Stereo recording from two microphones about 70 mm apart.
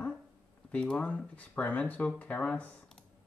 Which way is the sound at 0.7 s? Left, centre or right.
Centre.